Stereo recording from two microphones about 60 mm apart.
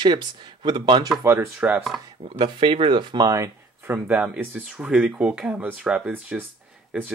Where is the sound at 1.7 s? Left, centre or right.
Centre.